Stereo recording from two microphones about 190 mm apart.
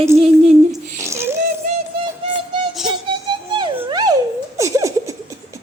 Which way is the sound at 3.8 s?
20° right (ahead or behind).